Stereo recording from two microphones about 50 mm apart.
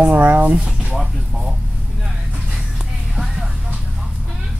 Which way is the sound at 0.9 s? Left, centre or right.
Centre.